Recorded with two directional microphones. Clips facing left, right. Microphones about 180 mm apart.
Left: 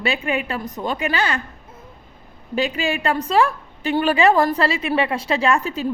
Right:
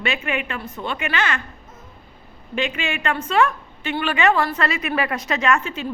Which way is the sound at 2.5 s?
35° left (ahead or behind).